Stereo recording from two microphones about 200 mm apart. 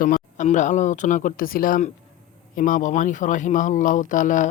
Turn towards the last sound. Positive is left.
turn(degrees=40)  # may be behind; listen again after turning